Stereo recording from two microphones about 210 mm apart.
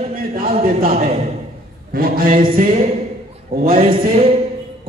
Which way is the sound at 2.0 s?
40° right (ahead or behind).